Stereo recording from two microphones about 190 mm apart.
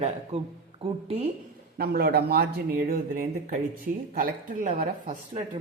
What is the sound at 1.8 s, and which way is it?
Speech, 55° right (ahead or behind).